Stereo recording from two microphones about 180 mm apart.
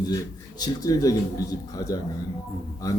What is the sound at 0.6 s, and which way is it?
Speech, 20° left (ahead or behind).